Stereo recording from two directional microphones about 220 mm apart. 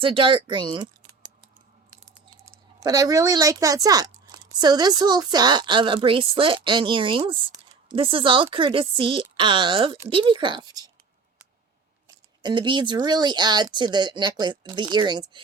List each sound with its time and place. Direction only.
0.0 s speech: 25° right (ahead or behind)
2.0 s speech: 15° right (ahead or behind)
12.0 s speech: 20° right (ahead or behind)